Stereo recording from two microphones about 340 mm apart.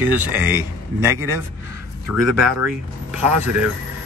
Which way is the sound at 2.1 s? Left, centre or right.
Right.